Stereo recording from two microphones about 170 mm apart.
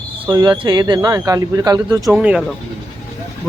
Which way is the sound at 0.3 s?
20° right (ahead or behind).